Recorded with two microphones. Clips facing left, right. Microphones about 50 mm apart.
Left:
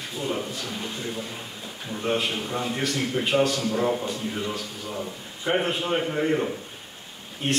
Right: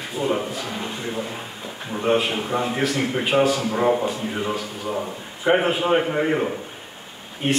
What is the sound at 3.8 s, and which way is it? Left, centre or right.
A man's voice, right.